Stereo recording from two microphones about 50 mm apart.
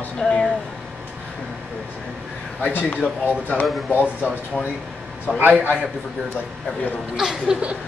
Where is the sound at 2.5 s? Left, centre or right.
Left.